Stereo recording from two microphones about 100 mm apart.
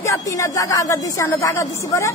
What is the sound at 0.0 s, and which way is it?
Speech, 30° left (ahead or behind).